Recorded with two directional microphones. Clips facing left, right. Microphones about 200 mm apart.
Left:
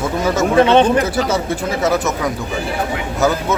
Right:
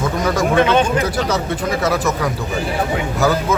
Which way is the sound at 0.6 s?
30° left (ahead or behind).